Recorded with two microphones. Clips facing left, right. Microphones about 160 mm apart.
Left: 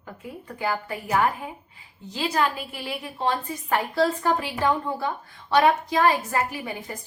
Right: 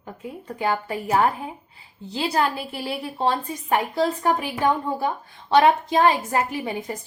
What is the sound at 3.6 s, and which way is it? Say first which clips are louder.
A woman's voice: right 1 dB; 15° right (ahead or behind).